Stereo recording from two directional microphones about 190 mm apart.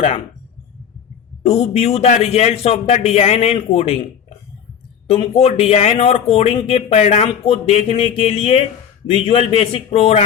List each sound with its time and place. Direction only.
1.5 s speech: 35° left (ahead or behind)
5.0 s speech: 30° left (ahead or behind)